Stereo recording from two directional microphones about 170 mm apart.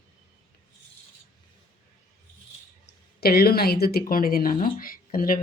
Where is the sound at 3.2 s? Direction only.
65° left (ahead or behind).